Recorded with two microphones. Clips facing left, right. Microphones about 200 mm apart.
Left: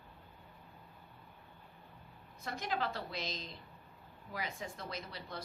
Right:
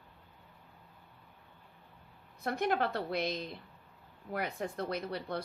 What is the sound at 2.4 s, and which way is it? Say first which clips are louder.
A woman's voice: right 7 dB; 60° right (ahead or behind).